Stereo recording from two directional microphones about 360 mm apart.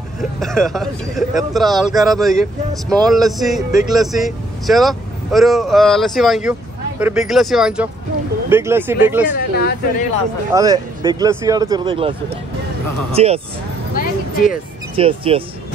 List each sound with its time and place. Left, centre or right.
0.4 s a man's voice: centre
9.3 s speech: left
10.5 s speech: centre
13.1 s speech: centre
14.0 s speech: left
15.0 s speech: centre